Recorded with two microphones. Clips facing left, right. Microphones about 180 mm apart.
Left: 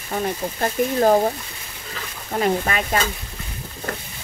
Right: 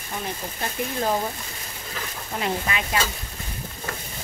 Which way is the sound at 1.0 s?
50° left (ahead or behind).